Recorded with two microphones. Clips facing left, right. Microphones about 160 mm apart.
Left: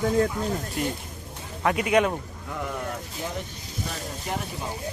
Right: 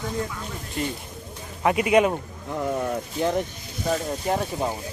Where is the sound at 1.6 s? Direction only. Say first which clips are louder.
Right 3 dB; 5° right (ahead or behind).